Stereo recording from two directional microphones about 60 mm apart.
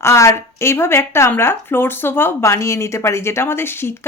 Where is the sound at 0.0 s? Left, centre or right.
Left.